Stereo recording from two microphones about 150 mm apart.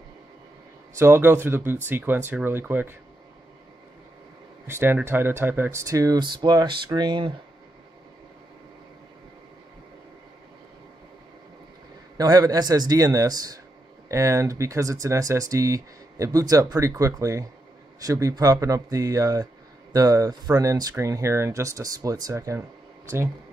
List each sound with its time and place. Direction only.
0.9 s speech: 15° right (ahead or behind)
4.6 s speech: 15° right (ahead or behind); by 7.3 s 30° right (ahead or behind)
12.2 s speech: 25° right (ahead or behind)